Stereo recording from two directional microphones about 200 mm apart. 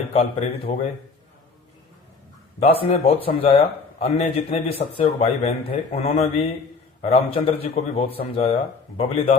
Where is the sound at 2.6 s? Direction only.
30° left (ahead or behind).